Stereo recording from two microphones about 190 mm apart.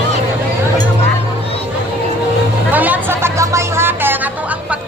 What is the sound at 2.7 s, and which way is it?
Music, 10° right (ahead or behind).